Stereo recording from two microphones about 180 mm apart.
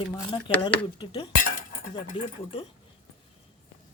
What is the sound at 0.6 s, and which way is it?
Speech, 30° left (ahead or behind).